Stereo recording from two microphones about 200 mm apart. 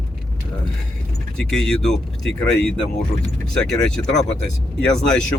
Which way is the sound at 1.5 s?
5° left (ahead or behind).